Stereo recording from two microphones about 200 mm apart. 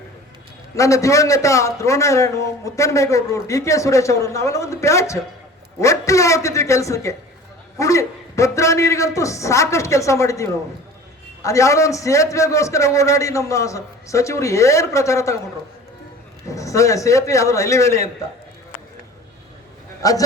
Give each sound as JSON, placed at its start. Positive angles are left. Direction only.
{"t": 0.8, "sound": "a man's voice", "side_deg": 15}
{"t": 16.5, "sound": "a man's voice", "side_deg": 15}
{"t": 20.0, "sound": "a man's voice", "side_deg": 15}